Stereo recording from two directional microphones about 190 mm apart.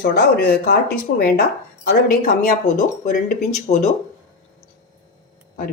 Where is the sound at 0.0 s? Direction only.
55° left (ahead or behind).